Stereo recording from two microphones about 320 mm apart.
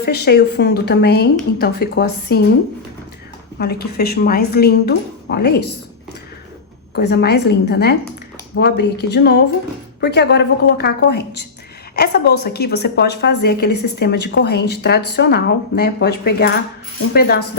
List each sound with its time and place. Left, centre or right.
0.0 s speech: left
3.6 s speech: left
6.9 s a woman's voice: left